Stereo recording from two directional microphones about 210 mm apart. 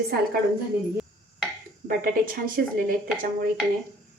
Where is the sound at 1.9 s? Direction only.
40° right (ahead or behind).